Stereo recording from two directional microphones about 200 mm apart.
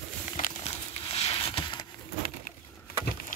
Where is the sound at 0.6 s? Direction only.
30° left (ahead or behind).